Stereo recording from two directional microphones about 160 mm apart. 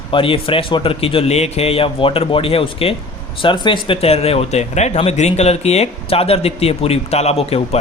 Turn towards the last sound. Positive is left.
turn(degrees=40)  # may be behind; listen again after turning